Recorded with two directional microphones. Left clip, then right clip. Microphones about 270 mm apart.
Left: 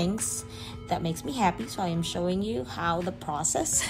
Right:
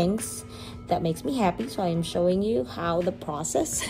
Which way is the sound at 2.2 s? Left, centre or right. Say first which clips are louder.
Right 8 dB; centre.